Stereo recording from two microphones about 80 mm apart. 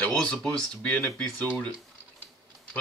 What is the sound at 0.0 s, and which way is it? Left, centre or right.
Speech, centre.